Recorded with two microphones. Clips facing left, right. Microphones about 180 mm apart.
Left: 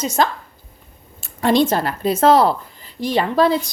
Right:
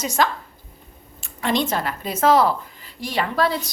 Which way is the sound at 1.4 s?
35° left (ahead or behind).